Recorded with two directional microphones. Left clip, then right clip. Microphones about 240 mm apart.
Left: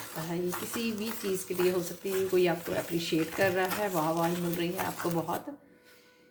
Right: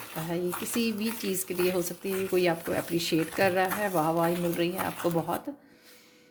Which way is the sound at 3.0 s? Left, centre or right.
Right.